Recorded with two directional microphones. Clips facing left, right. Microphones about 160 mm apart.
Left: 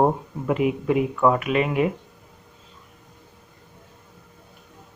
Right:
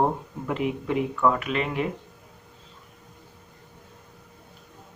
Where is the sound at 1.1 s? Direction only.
20° left (ahead or behind).